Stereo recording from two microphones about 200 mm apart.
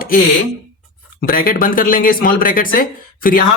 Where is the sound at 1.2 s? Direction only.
45° left (ahead or behind).